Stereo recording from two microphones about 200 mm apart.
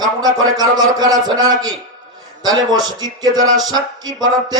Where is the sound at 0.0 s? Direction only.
20° right (ahead or behind).